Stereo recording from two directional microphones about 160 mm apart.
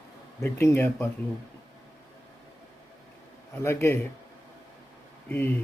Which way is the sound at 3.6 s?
15° left (ahead or behind).